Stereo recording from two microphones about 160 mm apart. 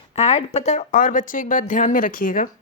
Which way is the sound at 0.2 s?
40° left (ahead or behind).